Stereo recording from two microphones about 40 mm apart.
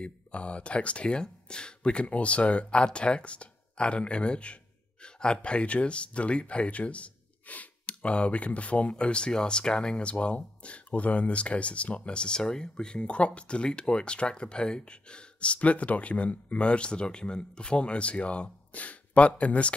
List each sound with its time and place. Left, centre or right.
0.0 s speech: left